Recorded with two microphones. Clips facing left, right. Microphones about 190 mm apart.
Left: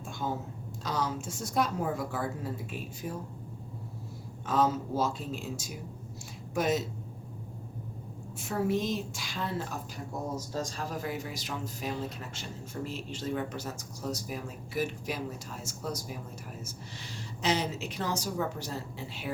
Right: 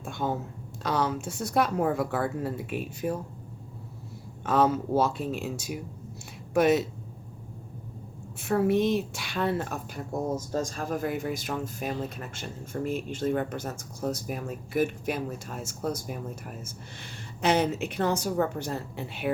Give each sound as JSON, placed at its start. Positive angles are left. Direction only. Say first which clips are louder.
{"t": 0.0, "sound": "a woman's voice", "louder": "right 4 dB", "side_deg": -65}
{"t": 4.4, "sound": "a woman's voice", "louder": "right 4 dB", "side_deg": -65}
{"t": 8.4, "sound": "a woman's voice", "louder": "right 6 dB", "side_deg": -65}